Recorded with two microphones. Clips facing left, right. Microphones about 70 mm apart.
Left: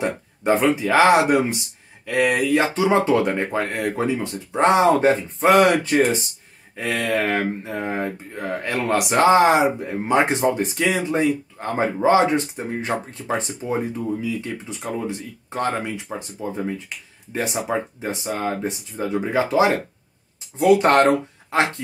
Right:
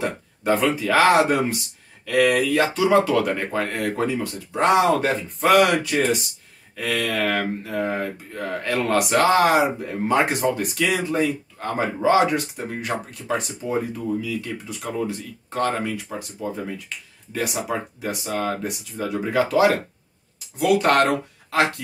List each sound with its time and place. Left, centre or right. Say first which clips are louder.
0.0 s speech: left 2 dB; left